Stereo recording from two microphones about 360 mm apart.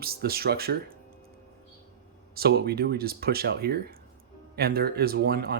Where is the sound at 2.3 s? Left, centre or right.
Right.